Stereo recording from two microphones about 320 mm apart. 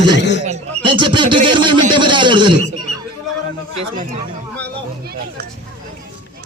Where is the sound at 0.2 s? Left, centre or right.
Left.